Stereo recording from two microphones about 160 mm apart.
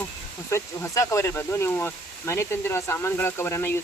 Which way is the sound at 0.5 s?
15° left (ahead or behind).